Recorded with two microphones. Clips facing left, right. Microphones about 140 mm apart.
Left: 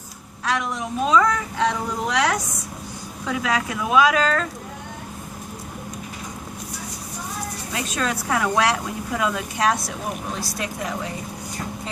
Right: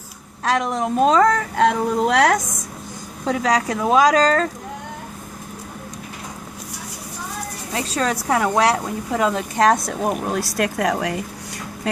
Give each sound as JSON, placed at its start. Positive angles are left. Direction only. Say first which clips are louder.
{"t": 0.7, "sound": "a woman's voice", "louder": "right 3 dB", "side_deg": -45}
{"t": 3.2, "sound": "speech", "louder": "right 5 dB", "side_deg": -40}
{"t": 7.7, "sound": "speech", "louder": "right 4 dB", "side_deg": -35}
{"t": 10.4, "sound": "speech", "louder": "right 8 dB", "side_deg": -70}